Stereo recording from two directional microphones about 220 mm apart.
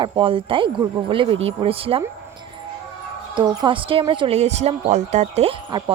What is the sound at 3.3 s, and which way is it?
A woman's voice, 20° right (ahead or behind).